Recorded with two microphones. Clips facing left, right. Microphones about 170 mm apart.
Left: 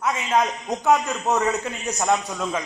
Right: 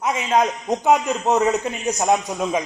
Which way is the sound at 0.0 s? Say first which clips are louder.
Right 3 dB; 20° right (ahead or behind).